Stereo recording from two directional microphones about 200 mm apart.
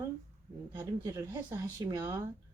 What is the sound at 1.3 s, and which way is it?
Speech, 10° right (ahead or behind).